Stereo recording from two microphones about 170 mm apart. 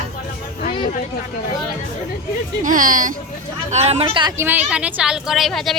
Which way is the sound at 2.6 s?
50° right (ahead or behind).